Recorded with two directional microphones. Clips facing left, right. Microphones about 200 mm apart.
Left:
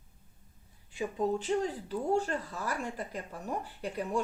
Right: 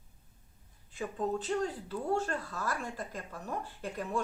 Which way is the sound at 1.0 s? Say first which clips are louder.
Left 3 dB; 10° left (ahead or behind).